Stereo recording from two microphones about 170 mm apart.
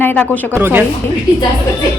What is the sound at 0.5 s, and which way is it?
Speech, 10° right (ahead or behind).